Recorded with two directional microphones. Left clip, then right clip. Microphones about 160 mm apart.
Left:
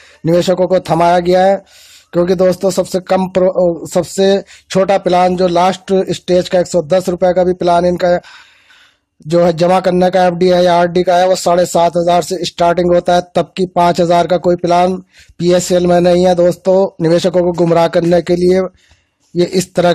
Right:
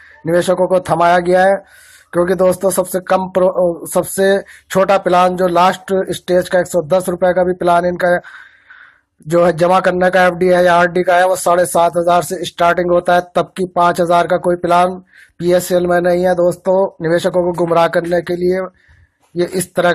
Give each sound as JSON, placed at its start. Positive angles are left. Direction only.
{"t": 0.2, "sound": "speech", "side_deg": 35}
{"t": 9.3, "sound": "speech", "side_deg": 25}